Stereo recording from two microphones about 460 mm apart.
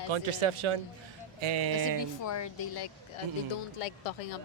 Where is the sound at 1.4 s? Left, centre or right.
Right.